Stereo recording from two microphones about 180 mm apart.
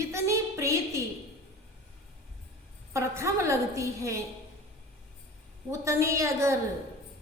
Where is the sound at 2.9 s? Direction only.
15° right (ahead or behind).